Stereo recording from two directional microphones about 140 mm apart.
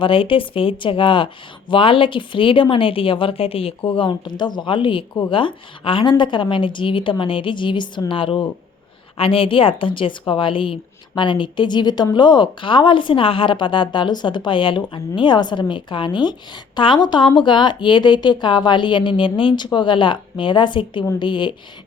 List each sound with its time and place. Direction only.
0.0 s a woman's voice: 40° left (ahead or behind)